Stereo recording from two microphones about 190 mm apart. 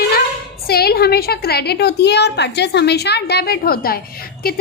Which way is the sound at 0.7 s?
55° left (ahead or behind).